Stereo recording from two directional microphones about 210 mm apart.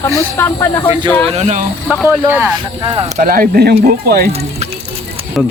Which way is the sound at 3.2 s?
45° right (ahead or behind).